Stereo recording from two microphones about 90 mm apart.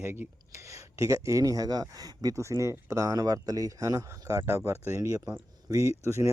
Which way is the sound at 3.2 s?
45° right (ahead or behind).